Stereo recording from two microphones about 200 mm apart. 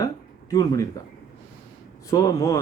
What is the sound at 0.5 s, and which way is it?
Speech, 20° left (ahead or behind).